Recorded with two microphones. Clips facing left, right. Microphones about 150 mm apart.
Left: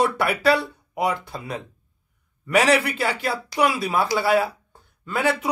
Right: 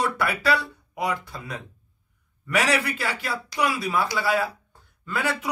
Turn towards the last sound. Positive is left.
turn(degrees=25)  # may be behind; listen again after turning